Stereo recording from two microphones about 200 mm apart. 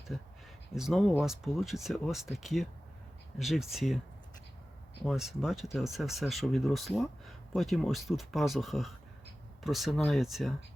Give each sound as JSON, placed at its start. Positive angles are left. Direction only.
{"t": 0.7, "sound": "speech", "side_deg": 0}
{"t": 5.0, "sound": "speech", "side_deg": 0}